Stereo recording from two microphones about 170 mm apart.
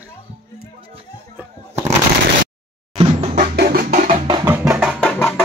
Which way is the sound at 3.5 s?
70° right (ahead or behind).